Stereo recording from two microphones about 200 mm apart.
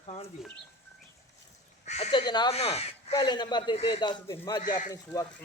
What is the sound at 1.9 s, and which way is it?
Speech, 35° left (ahead or behind).